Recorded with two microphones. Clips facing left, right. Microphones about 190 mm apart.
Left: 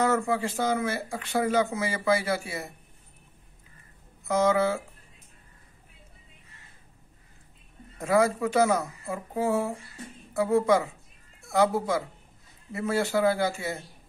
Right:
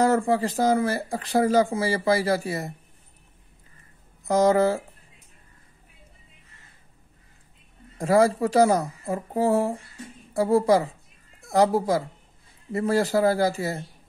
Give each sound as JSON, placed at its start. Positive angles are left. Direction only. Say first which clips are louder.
{"t": 0.0, "sound": "speech", "louder": "right 4 dB", "side_deg": -35}
{"t": 4.2, "sound": "speech", "louder": "right 4 dB", "side_deg": -35}
{"t": 8.0, "sound": "speech", "louder": "right 4 dB", "side_deg": -35}